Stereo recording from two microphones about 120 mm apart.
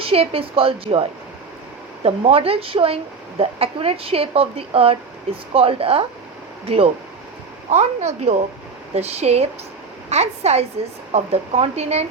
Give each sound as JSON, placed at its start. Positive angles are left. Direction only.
{"t": 0.0, "sound": "a woman's voice", "side_deg": -55}
{"t": 2.0, "sound": "a woman's voice", "side_deg": -55}